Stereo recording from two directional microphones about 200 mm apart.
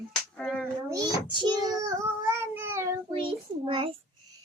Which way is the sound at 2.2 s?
10° right (ahead or behind).